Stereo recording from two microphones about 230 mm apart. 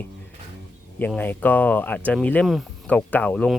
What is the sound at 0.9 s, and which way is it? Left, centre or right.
Speech, centre.